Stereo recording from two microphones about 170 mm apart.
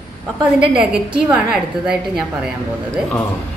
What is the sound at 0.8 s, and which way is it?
A woman's voice, 5° right (ahead or behind).